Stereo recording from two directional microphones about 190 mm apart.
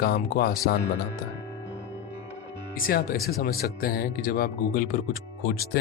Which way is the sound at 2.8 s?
50° left (ahead or behind).